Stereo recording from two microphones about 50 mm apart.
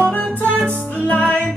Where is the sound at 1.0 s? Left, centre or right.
Left.